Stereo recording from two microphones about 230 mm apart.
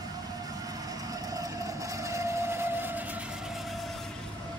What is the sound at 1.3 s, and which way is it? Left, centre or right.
Vehicle, centre.